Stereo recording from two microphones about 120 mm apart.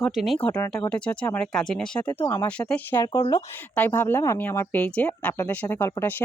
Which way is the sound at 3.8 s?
15° left (ahead or behind).